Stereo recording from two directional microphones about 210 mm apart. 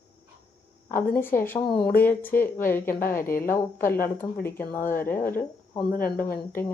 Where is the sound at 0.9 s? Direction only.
10° left (ahead or behind).